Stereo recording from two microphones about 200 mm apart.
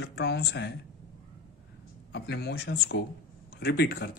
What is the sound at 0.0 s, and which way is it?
Speech, 55° left (ahead or behind).